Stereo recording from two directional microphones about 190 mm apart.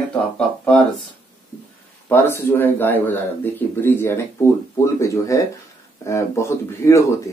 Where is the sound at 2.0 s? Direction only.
10° left (ahead or behind).